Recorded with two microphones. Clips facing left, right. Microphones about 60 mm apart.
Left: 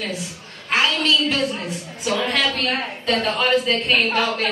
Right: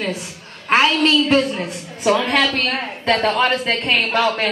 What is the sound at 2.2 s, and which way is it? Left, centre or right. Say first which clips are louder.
Speech: right 4 dB; right.